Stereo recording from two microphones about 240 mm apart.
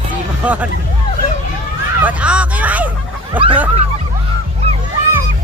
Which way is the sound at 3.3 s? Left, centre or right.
Right.